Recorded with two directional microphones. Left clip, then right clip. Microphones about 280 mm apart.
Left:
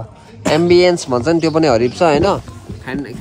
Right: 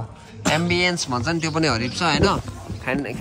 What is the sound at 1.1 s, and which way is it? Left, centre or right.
Speech, left.